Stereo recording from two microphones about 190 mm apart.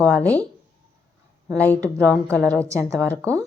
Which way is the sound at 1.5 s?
10° left (ahead or behind).